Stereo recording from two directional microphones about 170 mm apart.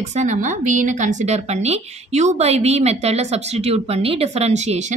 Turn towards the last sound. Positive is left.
turn(degrees=-40)  # may be behind; listen again after turning